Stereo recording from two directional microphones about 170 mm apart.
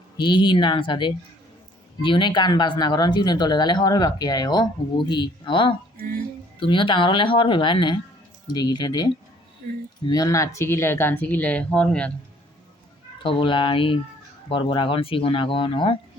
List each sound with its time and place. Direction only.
0.2 s speech: 30° left (ahead or behind)
10.1 s speech: 20° left (ahead or behind)
13.2 s speech: 30° left (ahead or behind)